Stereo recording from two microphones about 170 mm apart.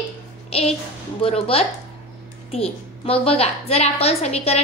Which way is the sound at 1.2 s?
35° left (ahead or behind).